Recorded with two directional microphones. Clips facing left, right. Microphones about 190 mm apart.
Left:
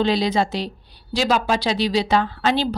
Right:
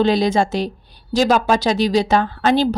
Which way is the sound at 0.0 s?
50° right (ahead or behind).